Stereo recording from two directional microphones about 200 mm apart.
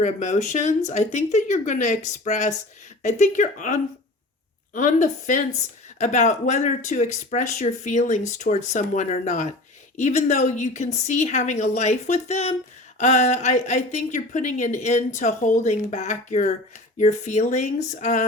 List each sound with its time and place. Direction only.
0.0 s speech: 35° left (ahead or behind)